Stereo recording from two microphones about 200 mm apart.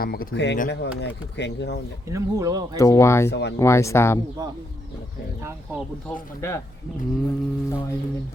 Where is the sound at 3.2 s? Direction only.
60° left (ahead or behind).